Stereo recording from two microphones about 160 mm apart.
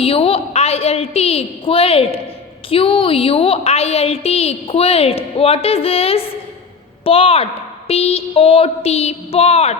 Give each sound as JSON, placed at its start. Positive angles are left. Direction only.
{"t": 0.0, "sound": "a woman's voice", "side_deg": 35}